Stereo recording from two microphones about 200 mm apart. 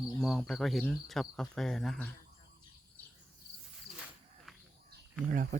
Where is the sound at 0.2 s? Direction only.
Centre (ahead or behind).